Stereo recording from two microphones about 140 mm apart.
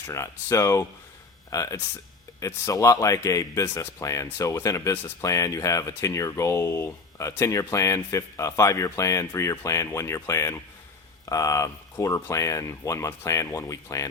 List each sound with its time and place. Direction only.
0.1 s speech: 20° left (ahead or behind)